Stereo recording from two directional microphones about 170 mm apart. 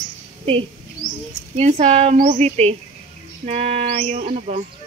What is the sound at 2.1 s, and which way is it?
Speech, 45° right (ahead or behind).